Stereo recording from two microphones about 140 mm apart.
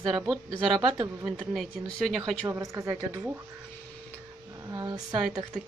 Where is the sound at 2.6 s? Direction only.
20° right (ahead or behind).